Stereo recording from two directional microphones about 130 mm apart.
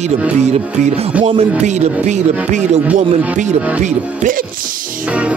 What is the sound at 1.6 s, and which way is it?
Speech, 60° right (ahead or behind).